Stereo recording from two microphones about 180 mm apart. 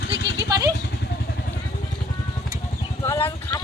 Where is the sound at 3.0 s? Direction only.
15° left (ahead or behind).